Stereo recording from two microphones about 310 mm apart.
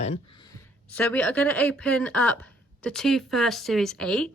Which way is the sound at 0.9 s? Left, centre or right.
Centre.